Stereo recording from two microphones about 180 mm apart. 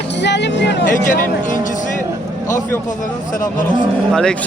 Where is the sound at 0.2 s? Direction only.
75° left (ahead or behind).